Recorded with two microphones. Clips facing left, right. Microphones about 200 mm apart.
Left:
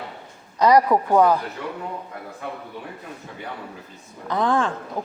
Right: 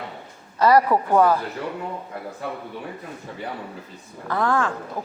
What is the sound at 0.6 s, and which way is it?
Speech, 15° left (ahead or behind).